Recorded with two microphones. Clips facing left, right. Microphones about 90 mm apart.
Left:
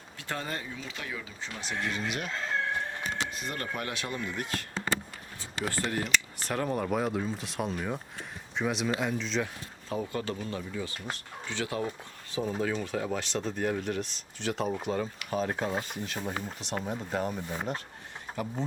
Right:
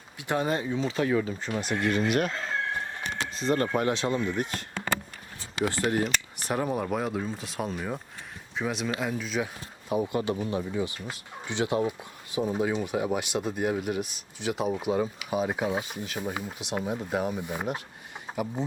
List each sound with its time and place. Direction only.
0.2 s speech: 15° right (ahead or behind)
0.7 s speech: 30° right (ahead or behind)
1.0 s speech: 45° right (ahead or behind)
3.3 s speech: 30° right (ahead or behind)
5.6 s speech: 20° right (ahead or behind)
6.5 s speech: 10° right (ahead or behind)